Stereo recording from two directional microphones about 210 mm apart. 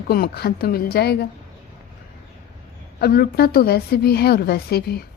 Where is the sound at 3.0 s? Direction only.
45° left (ahead or behind).